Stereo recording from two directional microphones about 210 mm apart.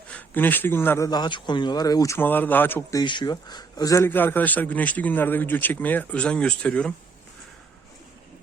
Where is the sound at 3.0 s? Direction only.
20° left (ahead or behind); by 6.9 s 5° left (ahead or behind).